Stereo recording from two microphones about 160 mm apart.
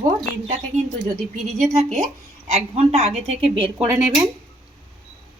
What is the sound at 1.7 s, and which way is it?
Speech, 45° right (ahead or behind).